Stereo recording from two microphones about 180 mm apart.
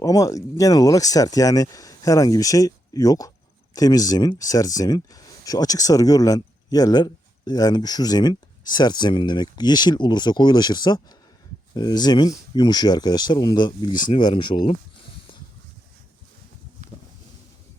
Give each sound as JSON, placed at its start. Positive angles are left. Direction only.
{"t": 0.0, "sound": "speech", "side_deg": 20}